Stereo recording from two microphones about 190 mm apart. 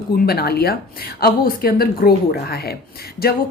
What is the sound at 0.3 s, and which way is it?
Speech, 55° left (ahead or behind).